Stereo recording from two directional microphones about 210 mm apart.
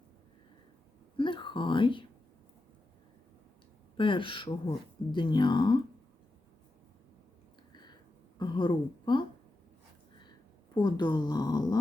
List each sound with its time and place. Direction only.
1.1 s speech: 25° left (ahead or behind)
3.9 s speech: 25° left (ahead or behind)
7.7 s a sound: 20° left (ahead or behind)
8.4 s speech: 25° left (ahead or behind)
10.8 s speech: 20° left (ahead or behind)